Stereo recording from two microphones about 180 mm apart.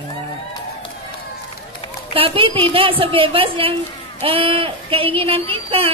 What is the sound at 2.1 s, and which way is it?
A woman's voice, 30° right (ahead or behind).